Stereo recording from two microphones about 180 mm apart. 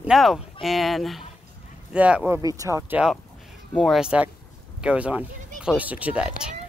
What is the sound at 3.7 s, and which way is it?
Speech, centre (ahead or behind).